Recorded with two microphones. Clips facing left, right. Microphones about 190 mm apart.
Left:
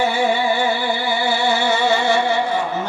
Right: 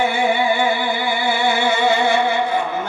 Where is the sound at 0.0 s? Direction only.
55° right (ahead or behind).